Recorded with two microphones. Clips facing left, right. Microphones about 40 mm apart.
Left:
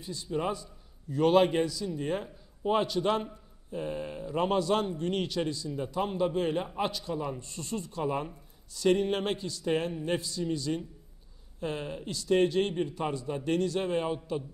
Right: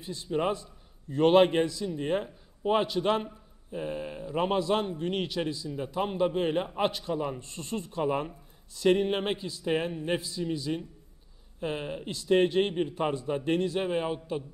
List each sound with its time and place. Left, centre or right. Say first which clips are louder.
0.0 s a man's voice: right 3 dB; right
3.7 s a man's voice: even; centre